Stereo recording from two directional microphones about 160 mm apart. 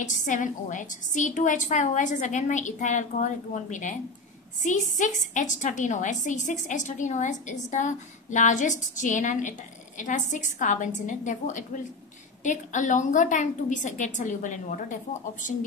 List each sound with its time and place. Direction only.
0.0 s a woman's voice: 55° left (ahead or behind)